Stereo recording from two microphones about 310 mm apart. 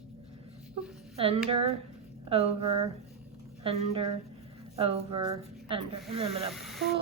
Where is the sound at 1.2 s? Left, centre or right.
Centre.